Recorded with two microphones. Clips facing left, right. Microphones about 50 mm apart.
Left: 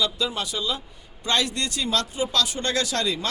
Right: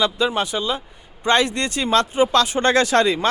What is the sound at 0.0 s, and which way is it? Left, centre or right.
Speech, right.